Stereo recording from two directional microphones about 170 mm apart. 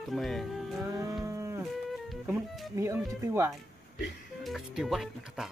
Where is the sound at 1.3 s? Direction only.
15° right (ahead or behind).